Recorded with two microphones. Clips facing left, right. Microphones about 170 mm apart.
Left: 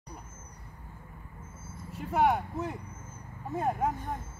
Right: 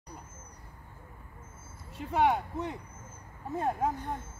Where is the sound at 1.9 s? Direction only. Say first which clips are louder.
Left 1 dB; 5° left (ahead or behind).